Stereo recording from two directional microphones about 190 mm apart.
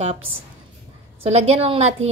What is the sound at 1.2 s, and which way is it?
Speech, 35° right (ahead or behind).